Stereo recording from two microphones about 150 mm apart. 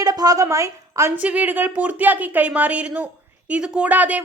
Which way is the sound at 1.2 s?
10° right (ahead or behind).